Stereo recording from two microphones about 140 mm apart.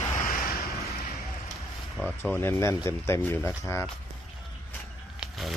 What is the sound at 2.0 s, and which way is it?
Speech, 15° left (ahead or behind).